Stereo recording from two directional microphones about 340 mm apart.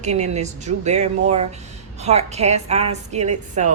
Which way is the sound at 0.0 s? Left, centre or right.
Centre.